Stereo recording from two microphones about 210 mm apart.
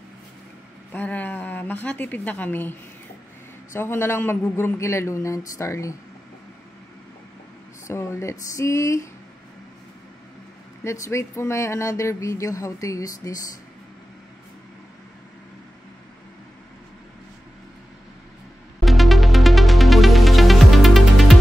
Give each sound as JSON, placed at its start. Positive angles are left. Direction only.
{"t": 0.9, "sound": "a woman's voice", "side_deg": 10}
{"t": 7.8, "sound": "speech", "side_deg": 15}
{"t": 10.8, "sound": "speech", "side_deg": 15}
{"t": 18.8, "sound": "music", "side_deg": 0}